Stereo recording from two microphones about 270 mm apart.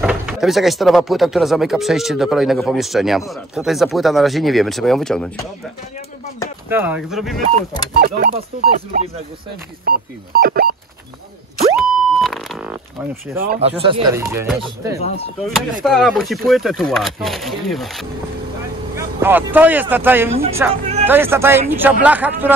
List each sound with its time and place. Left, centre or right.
0.0 s speech: centre
6.7 s speech: centre
7.9 s speech: right
11.7 s a sound: centre
13.4 s speech: right; by 15.0 s centre
15.0 s speech: left
15.4 s speech: centre